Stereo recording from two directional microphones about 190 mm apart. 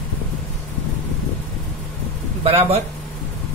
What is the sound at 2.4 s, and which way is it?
Speech, 30° right (ahead or behind).